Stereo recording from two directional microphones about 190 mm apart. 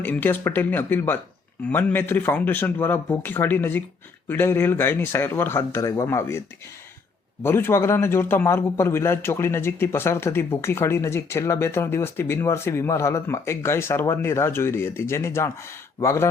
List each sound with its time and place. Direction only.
0.0 s a man's voice: 10° left (ahead or behind)
7.4 s a man's voice: 10° left (ahead or behind)